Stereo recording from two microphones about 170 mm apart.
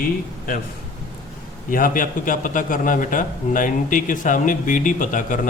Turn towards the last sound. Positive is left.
turn(degrees=50)  # may be behind; listen again after turning